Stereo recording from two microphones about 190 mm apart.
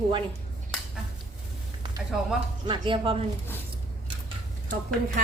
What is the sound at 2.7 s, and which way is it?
Speech, 25° right (ahead or behind).